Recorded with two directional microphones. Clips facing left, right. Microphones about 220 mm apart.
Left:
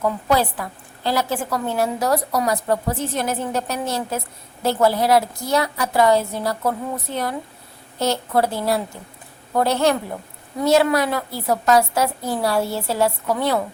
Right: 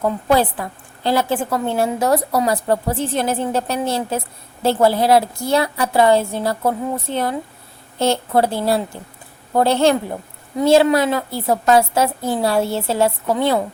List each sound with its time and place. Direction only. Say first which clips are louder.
0.0 s a woman's voice: right 3 dB; 25° right (ahead or behind)